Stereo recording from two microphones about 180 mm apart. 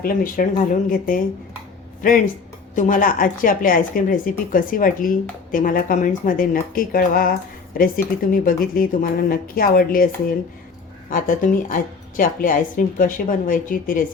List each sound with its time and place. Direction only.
0.0 s a woman's voice: 50° left (ahead or behind)
11.1 s a woman's voice: 50° left (ahead or behind)